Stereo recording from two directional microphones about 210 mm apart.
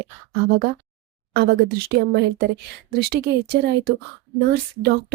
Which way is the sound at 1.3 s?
50° right (ahead or behind).